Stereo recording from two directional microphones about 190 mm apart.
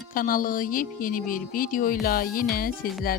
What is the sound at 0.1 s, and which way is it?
A woman's voice, 50° left (ahead or behind).